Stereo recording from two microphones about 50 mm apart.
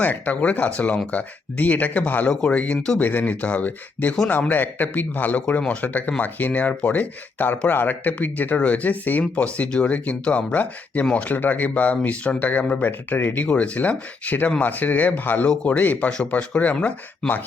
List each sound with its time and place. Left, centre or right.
0.0 s speech: left
5.5 s speech: left
5.8 s speech: left
12.8 s speech: left
13.4 s speech: left
16.0 s speech: left